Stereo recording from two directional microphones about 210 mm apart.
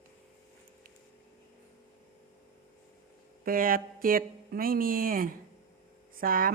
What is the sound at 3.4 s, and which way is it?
Speech, 40° right (ahead or behind).